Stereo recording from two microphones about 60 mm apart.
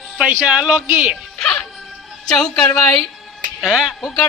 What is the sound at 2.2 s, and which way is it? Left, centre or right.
Speech, centre.